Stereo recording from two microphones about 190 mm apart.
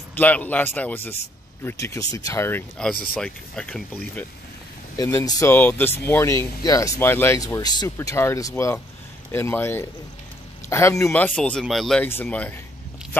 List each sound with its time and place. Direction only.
0.2 s speech: 10° left (ahead or behind)